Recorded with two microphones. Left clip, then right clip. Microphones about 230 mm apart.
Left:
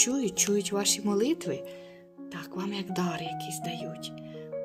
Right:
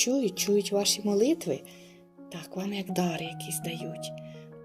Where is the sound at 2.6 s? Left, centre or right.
Centre.